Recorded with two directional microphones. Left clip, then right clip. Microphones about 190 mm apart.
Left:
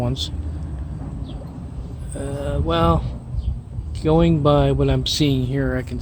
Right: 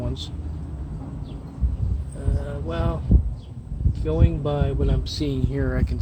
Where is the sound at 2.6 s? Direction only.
55° left (ahead or behind).